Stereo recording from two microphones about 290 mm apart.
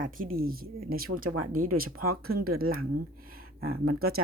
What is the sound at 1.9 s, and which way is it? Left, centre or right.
Speech, right.